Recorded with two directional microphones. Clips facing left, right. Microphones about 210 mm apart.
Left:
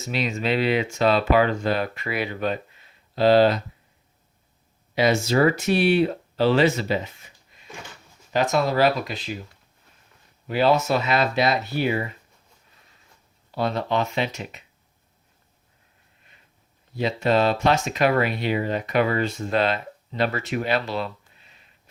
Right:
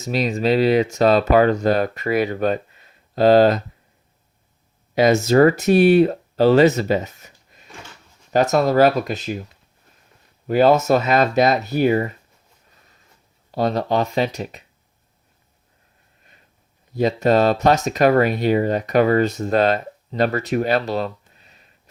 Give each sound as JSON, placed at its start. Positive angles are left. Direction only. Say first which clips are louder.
{"t": 0.0, "sound": "speech", "louder": "right 6 dB", "side_deg": -40}
{"t": 4.9, "sound": "speech", "louder": "right 6 dB", "side_deg": -45}
{"t": 10.4, "sound": "speech", "louder": "right 5 dB", "side_deg": -45}
{"t": 13.5, "sound": "speech", "louder": "right 4 dB", "side_deg": -40}
{"t": 16.9, "sound": "speech", "louder": "right 5 dB", "side_deg": -40}